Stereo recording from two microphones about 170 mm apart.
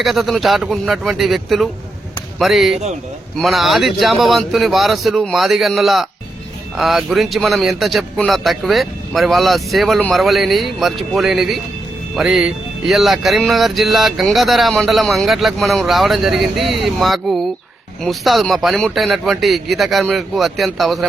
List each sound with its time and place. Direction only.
0.0 s speech: centre (ahead or behind)